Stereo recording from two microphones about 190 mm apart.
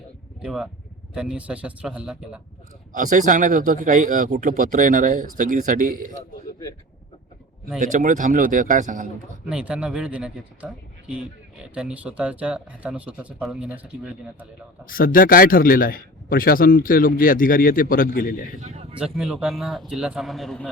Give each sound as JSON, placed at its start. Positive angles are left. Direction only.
{"t": 0.4, "sound": "a man's voice", "side_deg": -5}
{"t": 2.9, "sound": "speech", "side_deg": -45}
{"t": 7.8, "sound": "speech", "side_deg": -40}
{"t": 9.5, "sound": "a man's voice", "side_deg": -5}
{"t": 14.8, "sound": "speech", "side_deg": 50}
{"t": 18.6, "sound": "a sound", "side_deg": -35}
{"t": 18.9, "sound": "a man's voice", "side_deg": -5}